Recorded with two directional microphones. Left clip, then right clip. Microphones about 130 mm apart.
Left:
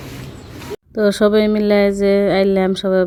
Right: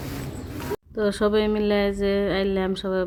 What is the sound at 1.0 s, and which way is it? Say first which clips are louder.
Speech: left 8 dB; 55° left (ahead or behind).